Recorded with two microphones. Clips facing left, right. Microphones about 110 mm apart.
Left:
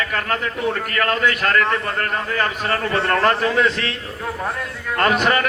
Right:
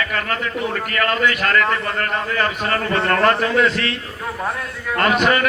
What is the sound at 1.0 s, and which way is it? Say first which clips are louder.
Speech: even; 35° left (ahead or behind).